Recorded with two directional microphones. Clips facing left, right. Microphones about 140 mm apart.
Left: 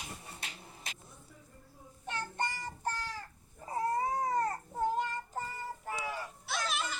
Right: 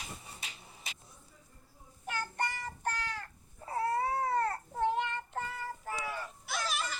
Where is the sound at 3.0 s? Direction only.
Centre (ahead or behind).